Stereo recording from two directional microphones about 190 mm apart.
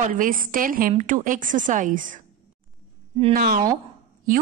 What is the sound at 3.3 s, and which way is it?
Speech, 50° right (ahead or behind).